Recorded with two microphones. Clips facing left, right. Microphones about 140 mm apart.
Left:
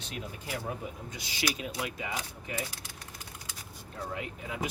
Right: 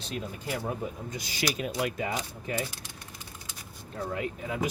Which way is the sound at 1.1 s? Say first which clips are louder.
Right 1 dB; 45° right (ahead or behind).